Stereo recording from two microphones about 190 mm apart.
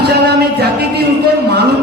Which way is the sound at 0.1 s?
60° right (ahead or behind).